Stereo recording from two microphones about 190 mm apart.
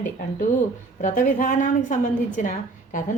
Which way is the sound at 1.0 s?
45° left (ahead or behind).